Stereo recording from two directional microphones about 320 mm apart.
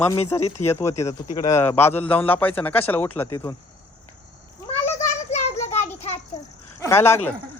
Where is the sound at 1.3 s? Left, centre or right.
Centre.